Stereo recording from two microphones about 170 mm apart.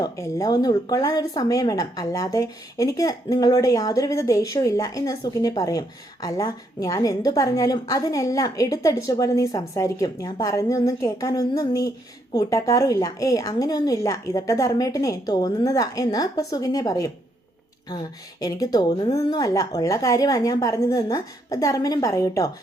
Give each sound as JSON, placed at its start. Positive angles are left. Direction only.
{"t": 0.0, "sound": "speech", "side_deg": 20}